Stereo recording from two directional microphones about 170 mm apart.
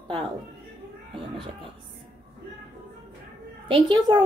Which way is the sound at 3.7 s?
25° right (ahead or behind).